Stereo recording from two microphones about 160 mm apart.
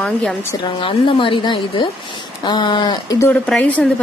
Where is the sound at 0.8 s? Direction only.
35° left (ahead or behind).